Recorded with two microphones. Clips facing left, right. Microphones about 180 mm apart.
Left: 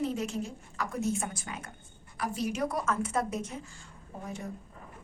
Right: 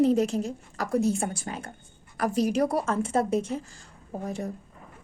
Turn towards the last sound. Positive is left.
turn(degrees=-40)  # may be behind; listen again after turning